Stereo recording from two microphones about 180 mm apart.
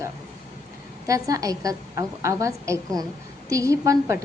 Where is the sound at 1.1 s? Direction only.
20° right (ahead or behind).